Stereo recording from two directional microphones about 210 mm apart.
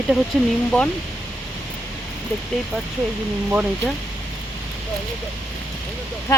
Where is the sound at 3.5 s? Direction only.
5° right (ahead or behind).